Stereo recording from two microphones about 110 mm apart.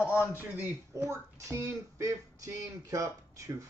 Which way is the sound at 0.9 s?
25° right (ahead or behind).